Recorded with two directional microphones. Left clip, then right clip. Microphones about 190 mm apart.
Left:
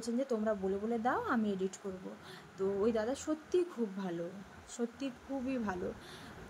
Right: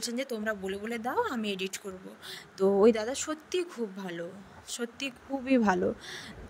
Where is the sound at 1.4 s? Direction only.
50° right (ahead or behind).